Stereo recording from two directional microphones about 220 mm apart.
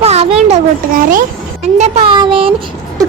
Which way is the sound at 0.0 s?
30° right (ahead or behind).